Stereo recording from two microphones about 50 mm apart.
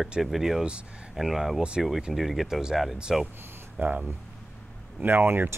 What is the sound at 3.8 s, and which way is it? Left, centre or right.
Speech, right.